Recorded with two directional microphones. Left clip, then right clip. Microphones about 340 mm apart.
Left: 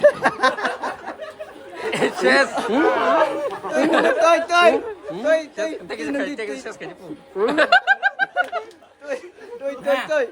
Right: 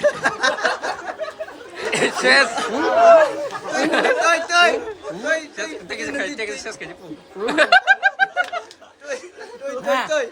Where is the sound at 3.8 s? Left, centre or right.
Centre.